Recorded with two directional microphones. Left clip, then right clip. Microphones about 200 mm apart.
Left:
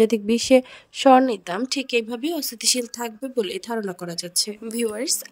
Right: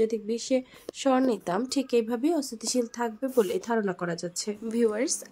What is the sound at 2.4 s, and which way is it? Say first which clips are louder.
Speech: left 5 dB; 50° left (ahead or behind).